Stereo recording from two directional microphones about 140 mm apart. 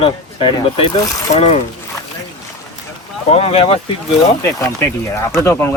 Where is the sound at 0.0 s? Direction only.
40° left (ahead or behind).